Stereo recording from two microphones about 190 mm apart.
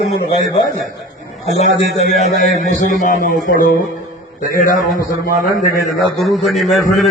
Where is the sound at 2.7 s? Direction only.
40° left (ahead or behind).